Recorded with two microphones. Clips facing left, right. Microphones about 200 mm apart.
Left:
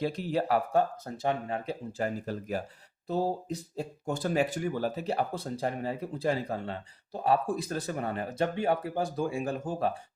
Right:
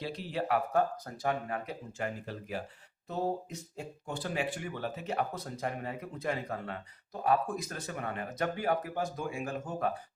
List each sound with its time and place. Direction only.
0.0 s speech: 45° left (ahead or behind); by 10.0 s 30° left (ahead or behind)